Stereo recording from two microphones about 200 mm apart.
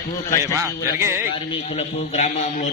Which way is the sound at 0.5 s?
15° right (ahead or behind).